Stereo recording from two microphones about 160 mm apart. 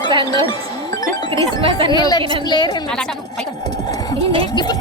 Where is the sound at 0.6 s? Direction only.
20° left (ahead or behind).